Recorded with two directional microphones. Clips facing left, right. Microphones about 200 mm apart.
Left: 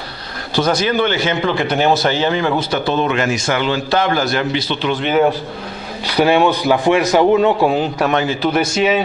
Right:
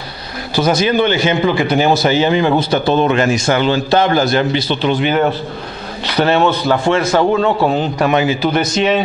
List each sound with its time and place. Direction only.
0.8 s a man's voice: 15° right (ahead or behind)
1.5 s speech: centre (ahead or behind); by 4.9 s 30° right (ahead or behind)
5.0 s a man's voice: 5° left (ahead or behind)
8.1 s a man's voice: 5° right (ahead or behind)
8.5 s speech: 5° left (ahead or behind)